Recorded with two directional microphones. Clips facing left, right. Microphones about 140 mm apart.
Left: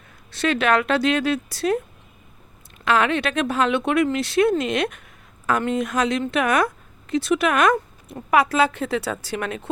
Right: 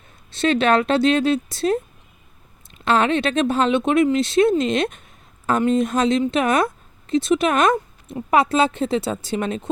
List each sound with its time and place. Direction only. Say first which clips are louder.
0.3 s speech: right 3 dB; 25° right (ahead or behind)
2.8 s speech: right 2 dB; 30° right (ahead or behind)